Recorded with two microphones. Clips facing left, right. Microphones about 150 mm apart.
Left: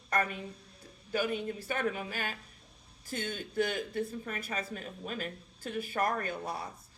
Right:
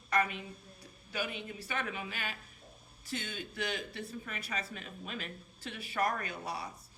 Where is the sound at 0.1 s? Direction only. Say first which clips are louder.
Even; 45° left (ahead or behind).